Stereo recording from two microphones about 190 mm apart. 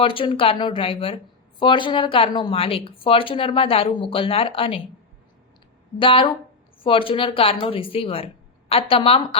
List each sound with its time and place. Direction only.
0.0 s speech: 30° left (ahead or behind)
6.0 s speech: 25° left (ahead or behind)